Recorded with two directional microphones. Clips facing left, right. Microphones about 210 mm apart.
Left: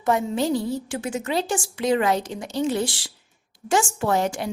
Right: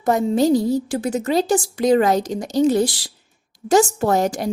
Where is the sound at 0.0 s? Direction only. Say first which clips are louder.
Right 5 dB; 40° right (ahead or behind).